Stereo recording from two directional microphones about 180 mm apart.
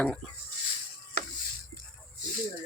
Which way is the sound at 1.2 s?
65° left (ahead or behind).